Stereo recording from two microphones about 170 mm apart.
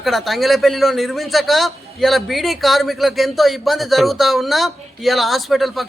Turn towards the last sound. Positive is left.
turn(degrees=0)  # may be behind; listen again after turning